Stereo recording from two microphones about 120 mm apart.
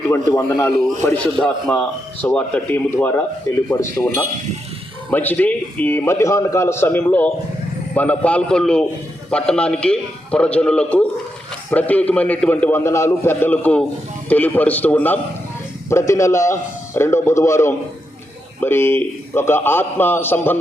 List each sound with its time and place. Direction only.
0.1 s a man's voice: 20° left (ahead or behind)
5.1 s a man's voice: 15° left (ahead or behind)